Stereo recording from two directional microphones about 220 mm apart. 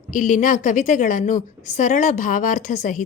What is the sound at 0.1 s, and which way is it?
A woman's voice, 35° left (ahead or behind).